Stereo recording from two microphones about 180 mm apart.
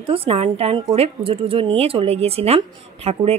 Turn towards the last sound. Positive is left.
turn(degrees=-35)  # may be behind; listen again after turning